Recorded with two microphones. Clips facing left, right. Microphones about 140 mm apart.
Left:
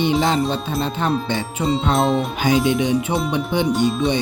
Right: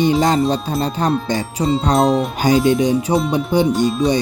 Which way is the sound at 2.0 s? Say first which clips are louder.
Right 4 dB; centre (ahead or behind).